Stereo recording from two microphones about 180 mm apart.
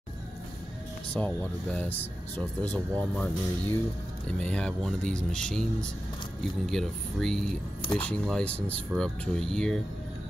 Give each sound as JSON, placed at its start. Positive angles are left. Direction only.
{"t": 1.1, "sound": "speech", "side_deg": 5}